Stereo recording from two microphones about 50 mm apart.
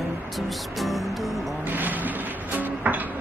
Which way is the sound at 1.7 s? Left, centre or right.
Right.